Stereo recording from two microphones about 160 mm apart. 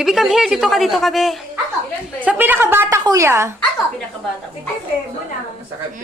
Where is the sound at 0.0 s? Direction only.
Centre (ahead or behind).